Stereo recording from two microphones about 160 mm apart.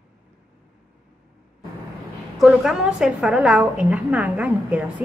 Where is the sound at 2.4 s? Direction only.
Centre (ahead or behind).